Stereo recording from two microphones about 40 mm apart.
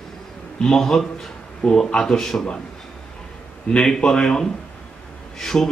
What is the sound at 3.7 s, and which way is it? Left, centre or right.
Speech, centre.